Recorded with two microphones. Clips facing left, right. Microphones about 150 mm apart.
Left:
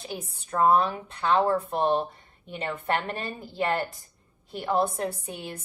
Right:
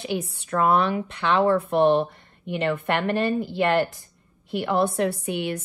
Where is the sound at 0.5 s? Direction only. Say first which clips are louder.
Right 1 dB; 70° right (ahead or behind).